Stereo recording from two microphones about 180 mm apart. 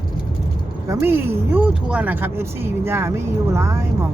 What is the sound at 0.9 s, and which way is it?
Speech, 15° right (ahead or behind).